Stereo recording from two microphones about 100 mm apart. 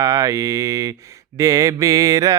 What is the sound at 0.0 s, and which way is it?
Mantra, 30° right (ahead or behind).